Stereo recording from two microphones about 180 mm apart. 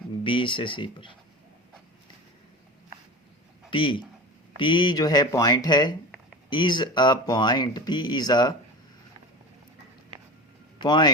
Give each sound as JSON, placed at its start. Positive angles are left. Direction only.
{"t": 0.3, "sound": "speech", "side_deg": 30}
{"t": 3.7, "sound": "speech", "side_deg": 25}
{"t": 10.8, "sound": "speech", "side_deg": 25}